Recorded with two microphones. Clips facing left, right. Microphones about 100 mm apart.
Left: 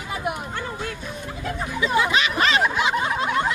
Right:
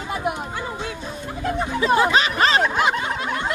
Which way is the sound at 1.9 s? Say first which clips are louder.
Right 3 dB; 35° right (ahead or behind).